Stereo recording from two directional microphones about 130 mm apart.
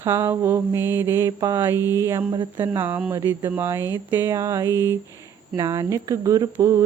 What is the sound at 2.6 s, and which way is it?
A woman's voice, 15° right (ahead or behind).